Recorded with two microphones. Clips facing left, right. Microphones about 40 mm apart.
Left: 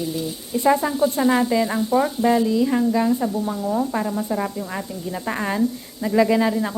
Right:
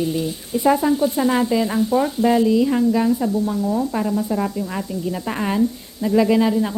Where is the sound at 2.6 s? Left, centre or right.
Centre.